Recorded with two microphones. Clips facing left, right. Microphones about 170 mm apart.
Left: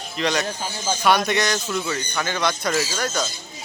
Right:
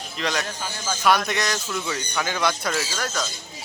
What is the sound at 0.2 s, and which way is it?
A man's voice, centre (ahead or behind).